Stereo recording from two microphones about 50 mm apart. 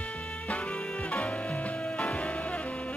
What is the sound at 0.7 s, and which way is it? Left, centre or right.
Music, centre.